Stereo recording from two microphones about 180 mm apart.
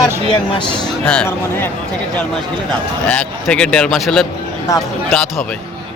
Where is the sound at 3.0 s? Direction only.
5° left (ahead or behind).